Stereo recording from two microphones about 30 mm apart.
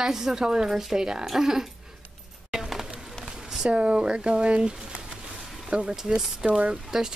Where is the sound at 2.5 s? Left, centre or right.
Centre.